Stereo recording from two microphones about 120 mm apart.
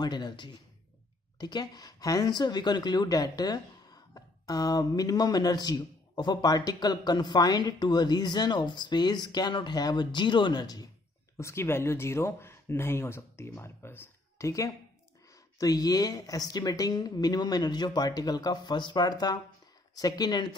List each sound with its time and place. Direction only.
0.0 s speech: 35° left (ahead or behind)
11.3 s speech: 20° left (ahead or behind)